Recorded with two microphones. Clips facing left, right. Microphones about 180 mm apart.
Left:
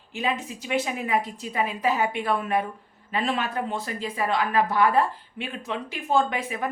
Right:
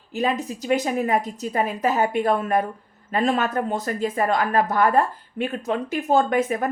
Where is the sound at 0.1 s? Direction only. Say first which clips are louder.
Right 5 dB; 40° right (ahead or behind).